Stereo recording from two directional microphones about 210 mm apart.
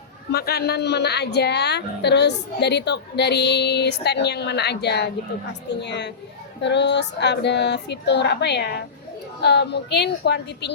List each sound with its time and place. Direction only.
0.3 s a woman's voice: 50° left (ahead or behind)